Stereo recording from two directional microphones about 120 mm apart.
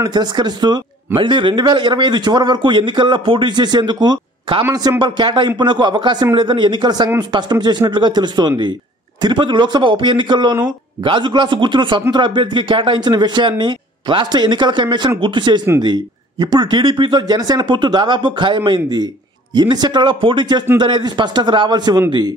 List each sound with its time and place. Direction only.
0.0 s a man's voice: 35° right (ahead or behind)